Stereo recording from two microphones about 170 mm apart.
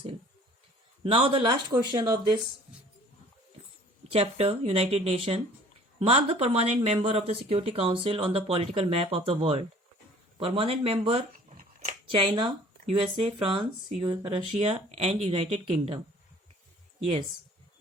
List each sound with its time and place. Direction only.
1.0 s speech: 30° right (ahead or behind)
4.1 s speech: 35° right (ahead or behind)
11.5 s a sound: 50° right (ahead or behind)
12.0 s speech: 30° right (ahead or behind)